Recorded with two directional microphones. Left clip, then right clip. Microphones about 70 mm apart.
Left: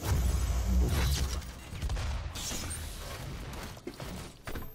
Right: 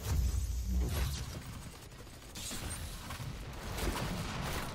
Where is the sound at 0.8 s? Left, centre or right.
Right.